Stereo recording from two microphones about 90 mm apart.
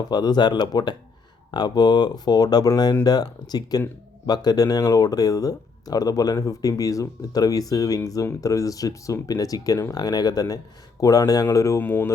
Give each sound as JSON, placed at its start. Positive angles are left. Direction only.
{"t": 0.1, "sound": "speech", "side_deg": 50}